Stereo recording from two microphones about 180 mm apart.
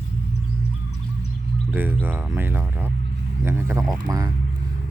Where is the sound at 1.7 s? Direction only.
10° right (ahead or behind).